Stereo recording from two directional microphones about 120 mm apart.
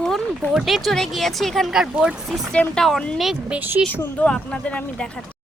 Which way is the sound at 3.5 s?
15° right (ahead or behind).